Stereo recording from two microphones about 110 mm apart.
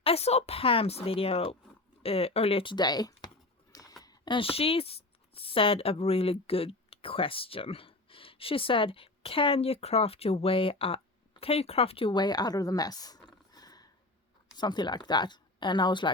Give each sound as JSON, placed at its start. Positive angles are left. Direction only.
{"t": 0.0, "sound": "speech", "side_deg": 65}
{"t": 2.7, "sound": "a sound", "side_deg": 40}
{"t": 4.4, "sound": "speech", "side_deg": 60}
{"t": 12.1, "sound": "speech", "side_deg": 40}
{"t": 13.5, "sound": "a sound", "side_deg": 35}
{"t": 14.5, "sound": "speech", "side_deg": 40}